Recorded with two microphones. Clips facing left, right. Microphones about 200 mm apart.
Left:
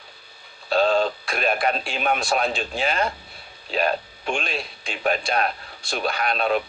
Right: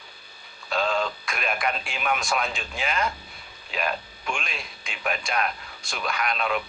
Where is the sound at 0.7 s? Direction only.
35° left (ahead or behind).